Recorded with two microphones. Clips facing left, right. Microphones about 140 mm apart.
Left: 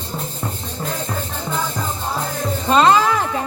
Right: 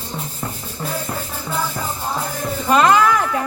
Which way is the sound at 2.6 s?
25° left (ahead or behind).